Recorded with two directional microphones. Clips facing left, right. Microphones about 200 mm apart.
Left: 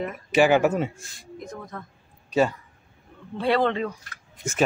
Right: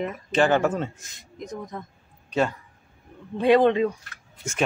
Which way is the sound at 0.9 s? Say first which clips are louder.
Left 2 dB; 20° right (ahead or behind).